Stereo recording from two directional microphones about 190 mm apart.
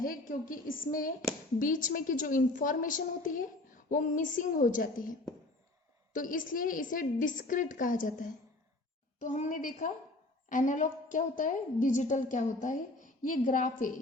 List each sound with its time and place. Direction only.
0.0 s a woman's voice: 45° left (ahead or behind)
6.1 s a woman's voice: 45° left (ahead or behind)